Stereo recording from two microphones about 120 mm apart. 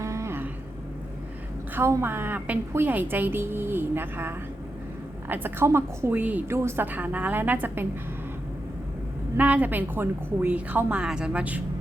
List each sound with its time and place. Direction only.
0.0 s vehicle: 25° right (ahead or behind)
1.7 s a woman's voice: 20° right (ahead or behind)
9.4 s a woman's voice: 15° right (ahead or behind)